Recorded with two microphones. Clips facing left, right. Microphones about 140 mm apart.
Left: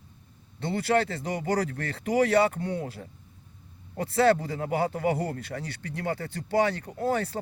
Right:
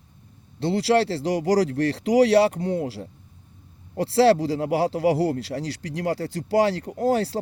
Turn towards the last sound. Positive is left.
turn(degrees=-80)